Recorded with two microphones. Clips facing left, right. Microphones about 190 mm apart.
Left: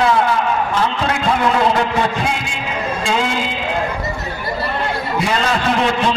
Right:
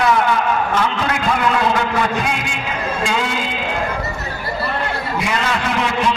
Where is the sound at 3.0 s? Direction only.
30° left (ahead or behind).